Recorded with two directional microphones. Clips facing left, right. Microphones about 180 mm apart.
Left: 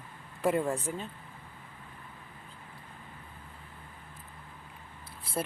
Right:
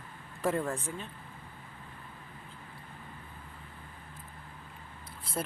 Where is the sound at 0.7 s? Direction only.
35° left (ahead or behind).